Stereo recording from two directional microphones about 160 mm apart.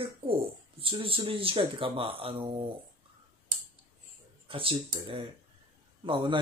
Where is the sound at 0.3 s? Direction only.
35° right (ahead or behind).